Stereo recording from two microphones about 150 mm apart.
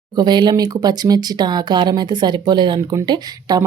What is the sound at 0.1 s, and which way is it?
Speech, 30° right (ahead or behind).